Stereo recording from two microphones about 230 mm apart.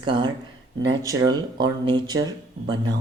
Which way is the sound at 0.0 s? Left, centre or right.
Right.